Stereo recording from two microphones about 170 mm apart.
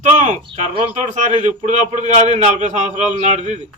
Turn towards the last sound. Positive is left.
turn(degrees=-45)  # may be behind; listen again after turning